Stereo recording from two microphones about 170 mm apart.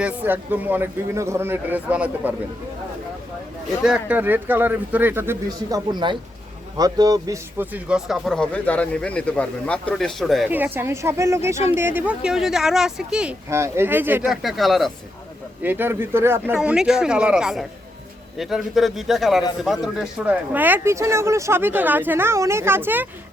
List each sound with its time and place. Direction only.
0.0 s speech: 10° right (ahead or behind)
3.8 s speech: 5° right (ahead or behind)
5.9 s speech: 25° right (ahead or behind)
7.6 s speech: 10° right (ahead or behind)
10.5 s speech: 10° right (ahead or behind)
13.5 s speech: 15° right (ahead or behind)
14.3 s speech: centre (ahead or behind)
15.6 s speech: 10° right (ahead or behind)
16.6 s speech: 5° right (ahead or behind)